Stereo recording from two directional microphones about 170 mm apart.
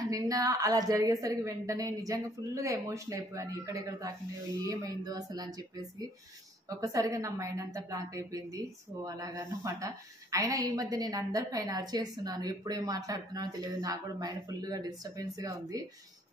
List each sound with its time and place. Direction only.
0.0 s a woman's voice: 20° right (ahead or behind)